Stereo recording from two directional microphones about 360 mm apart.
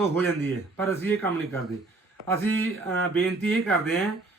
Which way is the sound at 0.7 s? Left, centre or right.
Centre.